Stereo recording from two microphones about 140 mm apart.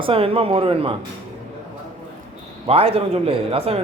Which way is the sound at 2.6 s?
45° right (ahead or behind).